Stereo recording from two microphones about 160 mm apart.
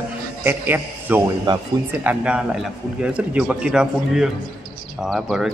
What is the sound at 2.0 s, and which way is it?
A man's voice, 10° right (ahead or behind).